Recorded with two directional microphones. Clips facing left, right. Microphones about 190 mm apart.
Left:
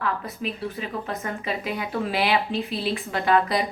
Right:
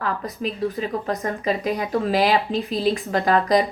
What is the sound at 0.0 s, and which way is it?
A woman's voice, 40° right (ahead or behind).